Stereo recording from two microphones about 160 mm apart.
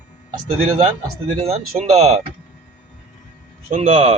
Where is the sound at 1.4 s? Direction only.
40° right (ahead or behind).